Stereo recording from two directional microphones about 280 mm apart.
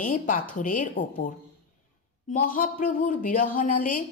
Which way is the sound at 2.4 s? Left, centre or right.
Left.